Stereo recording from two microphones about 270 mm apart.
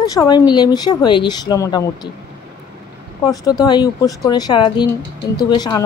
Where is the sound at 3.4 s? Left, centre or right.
Centre.